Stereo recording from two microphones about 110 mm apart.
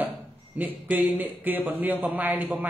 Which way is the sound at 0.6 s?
15° right (ahead or behind).